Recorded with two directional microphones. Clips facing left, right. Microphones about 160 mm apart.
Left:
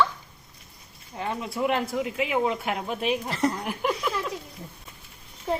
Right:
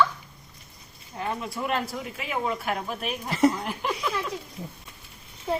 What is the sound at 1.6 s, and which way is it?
Speech, 15° left (ahead or behind).